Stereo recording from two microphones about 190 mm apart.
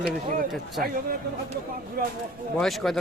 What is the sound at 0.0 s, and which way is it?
Speech, 50° right (ahead or behind).